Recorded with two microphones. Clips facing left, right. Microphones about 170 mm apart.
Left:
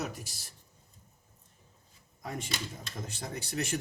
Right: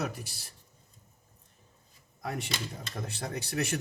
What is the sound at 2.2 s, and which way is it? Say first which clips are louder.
Speech: right 2 dB; 70° right (ahead or behind).